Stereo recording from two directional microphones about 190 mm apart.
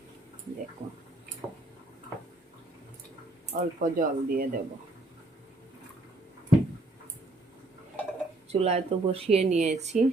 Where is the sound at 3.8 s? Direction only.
45° right (ahead or behind).